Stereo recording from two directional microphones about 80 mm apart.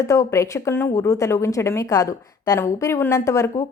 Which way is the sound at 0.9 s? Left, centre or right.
Left.